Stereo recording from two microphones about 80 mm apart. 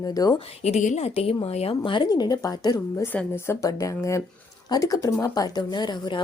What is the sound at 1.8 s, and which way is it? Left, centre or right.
Speech, left.